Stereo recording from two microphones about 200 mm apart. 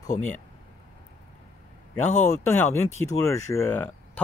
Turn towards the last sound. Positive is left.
turn(degrees=10)  # may be behind; listen again after turning